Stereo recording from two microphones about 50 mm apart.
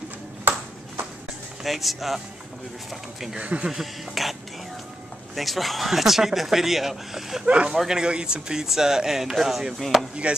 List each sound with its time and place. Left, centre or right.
1.6 s speech: centre
3.3 s speech: right
3.6 s speech: centre
7.4 s speech: right
7.7 s speech: centre
10.2 s speech: right